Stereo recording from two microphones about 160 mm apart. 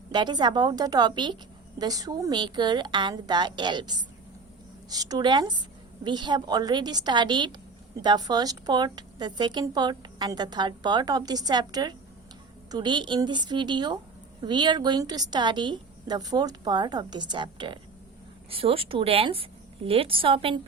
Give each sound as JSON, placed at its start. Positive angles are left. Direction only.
{"t": 0.1, "sound": "a woman's voice", "side_deg": -30}